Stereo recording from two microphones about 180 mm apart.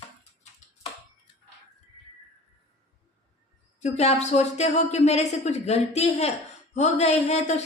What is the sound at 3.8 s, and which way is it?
A woman's voice, 40° left (ahead or behind).